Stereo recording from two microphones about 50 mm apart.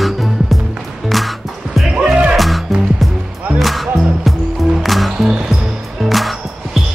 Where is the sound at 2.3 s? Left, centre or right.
Centre.